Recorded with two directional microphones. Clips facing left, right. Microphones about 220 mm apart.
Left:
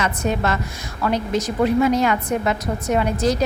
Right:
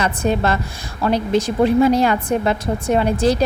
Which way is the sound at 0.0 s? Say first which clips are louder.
Right 3 dB; 30° right (ahead or behind).